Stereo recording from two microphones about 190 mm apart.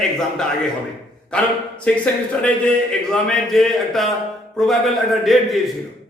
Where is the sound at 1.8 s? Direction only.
5° left (ahead or behind).